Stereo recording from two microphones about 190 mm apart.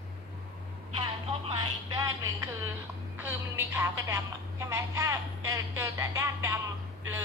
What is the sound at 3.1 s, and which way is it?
A woman's voice, 10° right (ahead or behind).